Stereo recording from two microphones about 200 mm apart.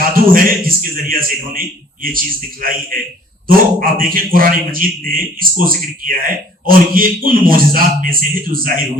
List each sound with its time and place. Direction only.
0.1 s a man's voice: 45° right (ahead or behind)